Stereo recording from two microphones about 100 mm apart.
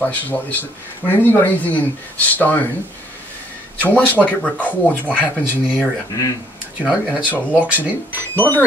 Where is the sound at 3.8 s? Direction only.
15° left (ahead or behind).